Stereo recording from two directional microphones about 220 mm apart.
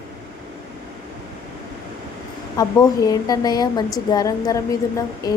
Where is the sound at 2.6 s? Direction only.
15° left (ahead or behind).